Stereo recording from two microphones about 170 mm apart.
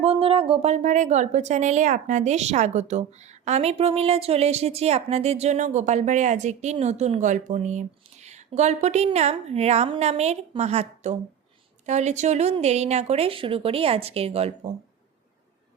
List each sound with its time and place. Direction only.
0.0 s speech: 35° right (ahead or behind)